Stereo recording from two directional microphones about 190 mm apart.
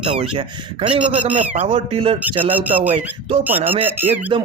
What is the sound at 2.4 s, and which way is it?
Speech, 10° right (ahead or behind).